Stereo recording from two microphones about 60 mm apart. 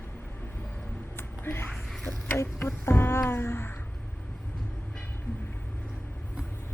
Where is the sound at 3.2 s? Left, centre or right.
Left.